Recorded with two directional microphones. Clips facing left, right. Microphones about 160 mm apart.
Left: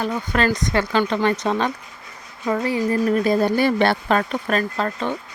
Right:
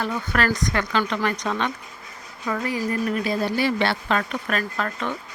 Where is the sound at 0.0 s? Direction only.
20° left (ahead or behind).